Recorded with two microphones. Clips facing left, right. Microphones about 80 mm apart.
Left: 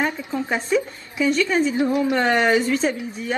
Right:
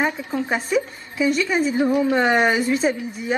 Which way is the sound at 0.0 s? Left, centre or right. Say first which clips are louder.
Right 1 dB; centre.